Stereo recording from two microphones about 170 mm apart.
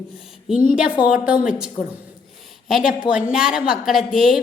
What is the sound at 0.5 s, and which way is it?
A woman's voice, 5° right (ahead or behind).